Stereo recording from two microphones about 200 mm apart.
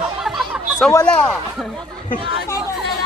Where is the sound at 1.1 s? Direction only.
5° left (ahead or behind).